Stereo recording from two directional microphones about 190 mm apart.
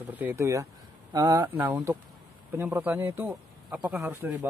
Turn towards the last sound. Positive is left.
turn(degrees=-10)  # may be behind; listen again after turning